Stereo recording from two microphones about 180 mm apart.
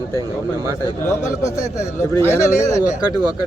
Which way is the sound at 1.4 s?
15° left (ahead or behind).